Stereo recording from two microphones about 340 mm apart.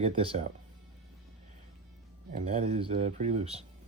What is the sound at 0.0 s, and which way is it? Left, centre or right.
Speech, centre.